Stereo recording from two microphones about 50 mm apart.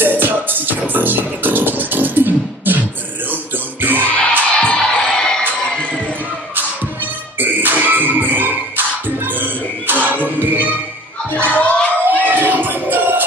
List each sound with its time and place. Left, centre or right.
0.0 s music: right
4.0 s music: left
4.6 s music: centre
5.8 s crowd: left
7.3 s music: right
11.5 s a sound: left
12.3 s music: right